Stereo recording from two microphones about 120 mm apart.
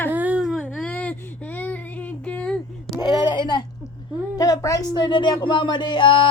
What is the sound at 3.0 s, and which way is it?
A woman's voice, 35° left (ahead or behind).